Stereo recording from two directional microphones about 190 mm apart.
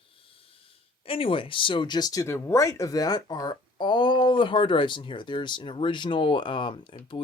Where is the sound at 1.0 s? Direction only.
30° left (ahead or behind).